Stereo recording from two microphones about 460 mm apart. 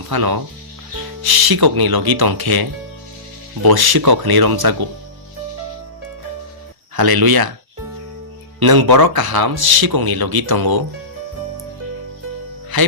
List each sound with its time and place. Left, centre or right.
0.1 s speech: right
6.9 s speech: right
8.5 s speech: right
12.7 s speech: right